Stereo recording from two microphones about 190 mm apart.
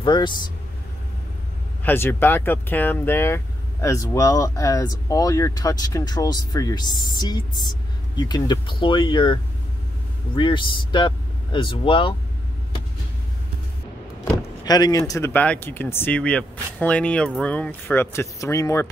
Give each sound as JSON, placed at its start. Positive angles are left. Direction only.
{"t": 0.0, "sound": "speech", "side_deg": 25}
{"t": 1.9, "sound": "speech", "side_deg": 10}
{"t": 14.3, "sound": "speech", "side_deg": 20}